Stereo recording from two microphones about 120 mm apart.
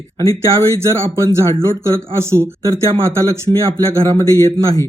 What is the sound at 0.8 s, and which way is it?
A man's voice, 25° right (ahead or behind).